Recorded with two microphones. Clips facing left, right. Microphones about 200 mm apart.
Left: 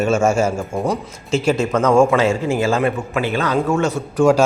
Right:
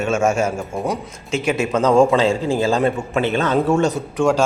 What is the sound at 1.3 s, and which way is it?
Speech, 15° right (ahead or behind).